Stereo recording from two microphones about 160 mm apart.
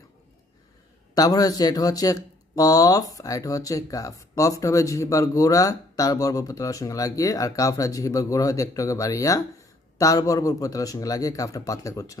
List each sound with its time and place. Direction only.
1.1 s speech: 25° left (ahead or behind)